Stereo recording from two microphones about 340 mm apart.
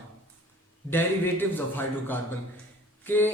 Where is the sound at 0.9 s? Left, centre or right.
Centre.